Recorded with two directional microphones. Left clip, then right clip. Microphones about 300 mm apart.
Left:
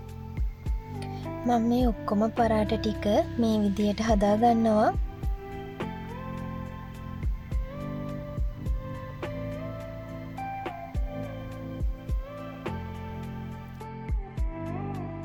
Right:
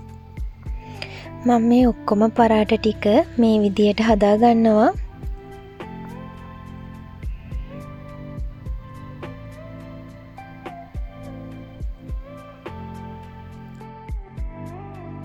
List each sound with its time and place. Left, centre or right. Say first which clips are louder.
0.9 s speech: right 2 dB; centre
10.3 s music: left 3 dB; centre